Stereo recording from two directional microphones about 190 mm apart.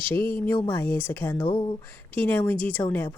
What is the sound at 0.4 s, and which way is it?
Speech, 10° left (ahead or behind).